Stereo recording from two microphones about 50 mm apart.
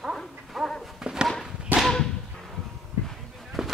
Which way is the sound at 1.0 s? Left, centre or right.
Centre.